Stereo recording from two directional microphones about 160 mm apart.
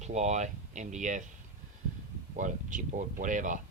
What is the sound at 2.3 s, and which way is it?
Speech, 55° right (ahead or behind).